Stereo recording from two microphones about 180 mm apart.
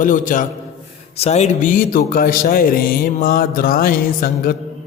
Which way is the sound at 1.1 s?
35° left (ahead or behind).